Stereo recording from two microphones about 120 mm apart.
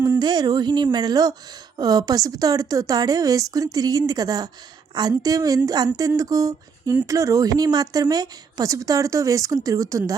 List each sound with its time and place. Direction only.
0.2 s speech: 35° right (ahead or behind)